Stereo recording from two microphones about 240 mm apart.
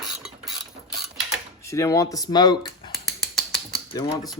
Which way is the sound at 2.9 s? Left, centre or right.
Centre.